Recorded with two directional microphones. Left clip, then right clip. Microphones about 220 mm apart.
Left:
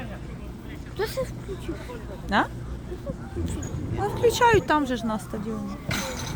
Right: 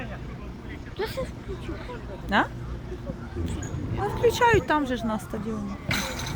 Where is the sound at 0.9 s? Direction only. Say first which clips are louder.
Left 3 dB; 35° left (ahead or behind).